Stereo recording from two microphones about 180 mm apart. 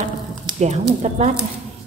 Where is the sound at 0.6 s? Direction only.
40° right (ahead or behind).